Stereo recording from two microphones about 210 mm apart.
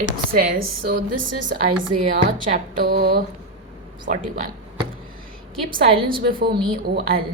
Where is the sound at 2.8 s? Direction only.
45° right (ahead or behind).